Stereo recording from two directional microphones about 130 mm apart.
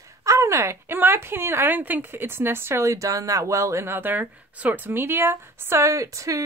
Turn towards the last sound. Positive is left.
turn(degrees=-25)  # may be behind; listen again after turning